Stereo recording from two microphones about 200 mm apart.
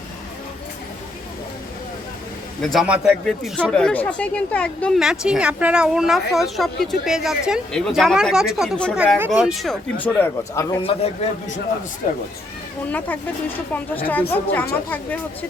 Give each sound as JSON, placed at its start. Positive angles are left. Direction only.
{"t": 2.6, "sound": "speech", "side_deg": 0}
{"t": 10.8, "sound": "a man's voice", "side_deg": 30}
{"t": 14.1, "sound": "speech", "side_deg": 10}